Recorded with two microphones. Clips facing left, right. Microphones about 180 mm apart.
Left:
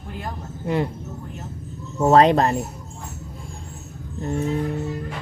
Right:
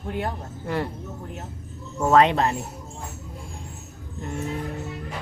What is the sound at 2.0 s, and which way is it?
Speech, 35° left (ahead or behind).